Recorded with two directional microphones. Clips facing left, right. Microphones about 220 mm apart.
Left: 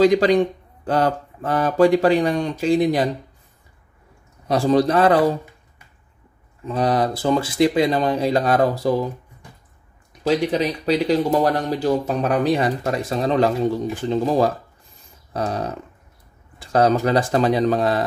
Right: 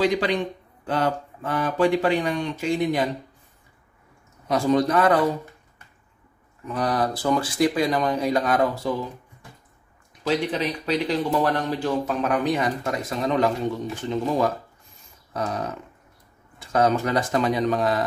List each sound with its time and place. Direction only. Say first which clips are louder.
0.0 s speech: left 7 dB; 40° left (ahead or behind)
4.5 s speech: left 3 dB; 30° left (ahead or behind)
6.6 s speech: left 4 dB; 25° left (ahead or behind)
10.9 s speech: left 6 dB; 40° left (ahead or behind)